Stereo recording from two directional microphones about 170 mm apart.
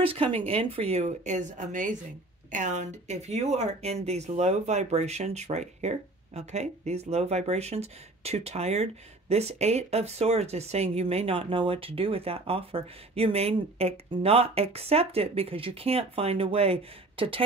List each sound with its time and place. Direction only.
0.0 s speech: 35° right (ahead or behind)